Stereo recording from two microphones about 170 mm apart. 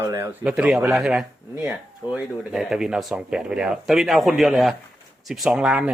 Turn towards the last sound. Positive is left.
turn(degrees=-5)  # may be behind; listen again after turning